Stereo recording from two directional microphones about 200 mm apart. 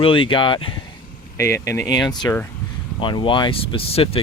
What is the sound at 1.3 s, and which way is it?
Speech, 15° left (ahead or behind).